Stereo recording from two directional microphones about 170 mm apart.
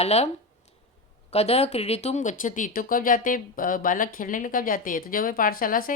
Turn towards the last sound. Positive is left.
turn(degrees=55)  # may be behind; listen again after turning